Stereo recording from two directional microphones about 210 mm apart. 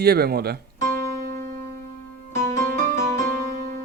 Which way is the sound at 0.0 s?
50° right (ahead or behind).